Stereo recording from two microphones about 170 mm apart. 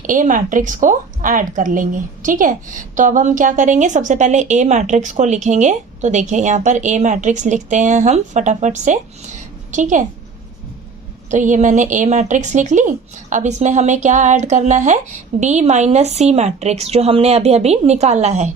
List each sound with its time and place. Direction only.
0.0 s a woman's voice: 50° right (ahead or behind)
11.3 s a woman's voice: 50° right (ahead or behind)